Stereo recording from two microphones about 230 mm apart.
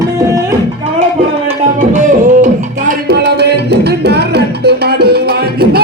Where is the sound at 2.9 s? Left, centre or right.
Right.